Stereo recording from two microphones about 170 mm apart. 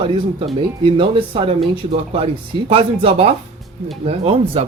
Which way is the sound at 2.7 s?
35° right (ahead or behind).